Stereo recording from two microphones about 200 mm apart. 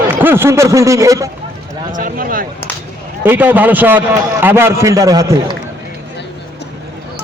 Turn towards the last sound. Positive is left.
turn(degrees=-15)  # may be behind; listen again after turning